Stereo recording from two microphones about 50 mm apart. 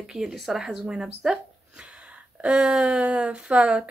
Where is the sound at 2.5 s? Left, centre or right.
Centre.